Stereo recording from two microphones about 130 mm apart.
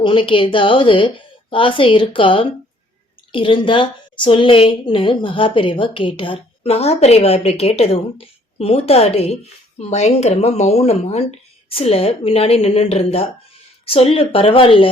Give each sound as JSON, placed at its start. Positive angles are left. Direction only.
{"t": 0.0, "sound": "a woman's voice", "side_deg": 40}